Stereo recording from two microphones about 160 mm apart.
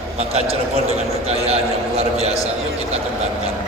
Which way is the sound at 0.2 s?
40° right (ahead or behind).